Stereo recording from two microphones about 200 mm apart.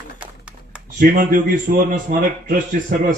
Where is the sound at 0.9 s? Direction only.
45° right (ahead or behind).